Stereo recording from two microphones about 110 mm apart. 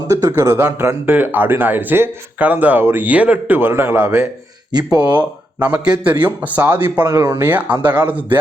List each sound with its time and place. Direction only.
0.1 s speech: 30° right (ahead or behind)
4.7 s speech: 40° right (ahead or behind)
4.9 s speech: 15° right (ahead or behind)